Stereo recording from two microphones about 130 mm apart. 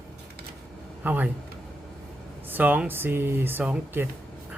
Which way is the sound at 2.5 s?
10° right (ahead or behind).